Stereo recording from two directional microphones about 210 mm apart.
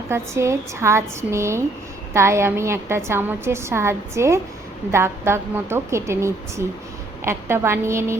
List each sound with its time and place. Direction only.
0.1 s a woman's voice: 15° right (ahead or behind)